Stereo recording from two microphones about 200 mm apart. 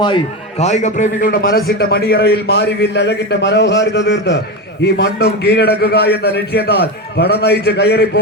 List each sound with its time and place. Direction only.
0.6 s a man's voice: 35° left (ahead or behind); by 8.2 s 55° left (ahead or behind)